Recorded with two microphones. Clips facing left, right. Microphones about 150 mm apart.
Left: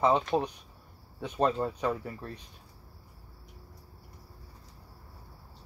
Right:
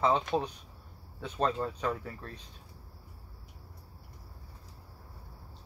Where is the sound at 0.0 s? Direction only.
15° left (ahead or behind).